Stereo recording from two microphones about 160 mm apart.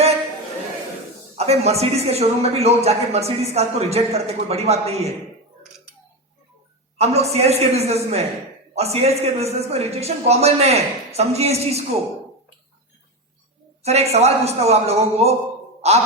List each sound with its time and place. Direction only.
1.4 s a man's voice: 40° right (ahead or behind)
7.0 s a man's voice: 40° right (ahead or behind)
13.8 s a man's voice: 40° right (ahead or behind)
15.8 s music: 40° right (ahead or behind)